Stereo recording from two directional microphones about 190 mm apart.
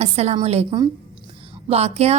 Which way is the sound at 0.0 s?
35° right (ahead or behind).